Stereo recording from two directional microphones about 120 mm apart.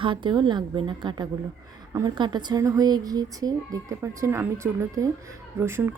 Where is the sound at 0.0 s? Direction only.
45° right (ahead or behind).